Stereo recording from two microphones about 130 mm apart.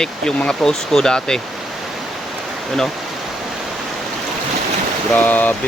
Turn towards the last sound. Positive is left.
turn(degrees=10)  # may be behind; listen again after turning